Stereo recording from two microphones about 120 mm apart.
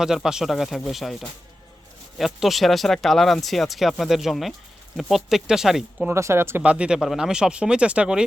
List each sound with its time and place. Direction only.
0.0 s speech: 5° right (ahead or behind)
6.1 s speech: 20° right (ahead or behind)
6.6 s speech: 10° right (ahead or behind)